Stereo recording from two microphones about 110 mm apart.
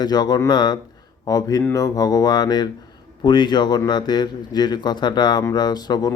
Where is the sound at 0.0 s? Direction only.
40° left (ahead or behind).